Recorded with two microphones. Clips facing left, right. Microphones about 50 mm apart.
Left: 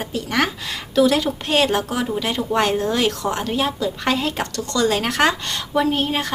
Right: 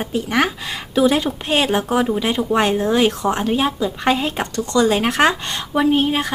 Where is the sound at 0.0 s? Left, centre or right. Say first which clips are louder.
Right 3 dB; centre.